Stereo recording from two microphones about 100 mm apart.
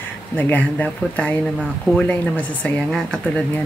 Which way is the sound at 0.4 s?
15° left (ahead or behind).